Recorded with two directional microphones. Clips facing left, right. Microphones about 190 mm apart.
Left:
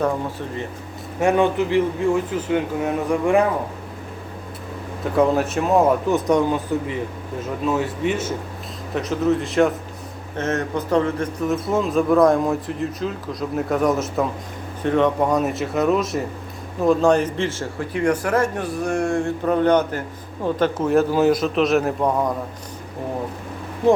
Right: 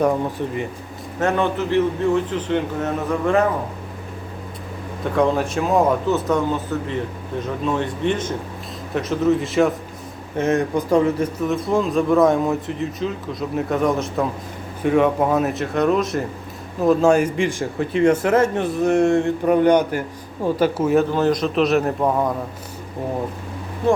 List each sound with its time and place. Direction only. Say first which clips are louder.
1.2 s a man's voice: left 2 dB; 15° left (ahead or behind)
5.1 s a man's voice: left 1 dB; centre (ahead or behind)
6.1 s a man's voice: left 1 dB; 15° left (ahead or behind); by 9.7 s centre (ahead or behind)
10.3 s a man's voice: right 4 dB; 15° right (ahead or behind)
14.8 s a man's voice: right 1 dB; 10° right (ahead or behind)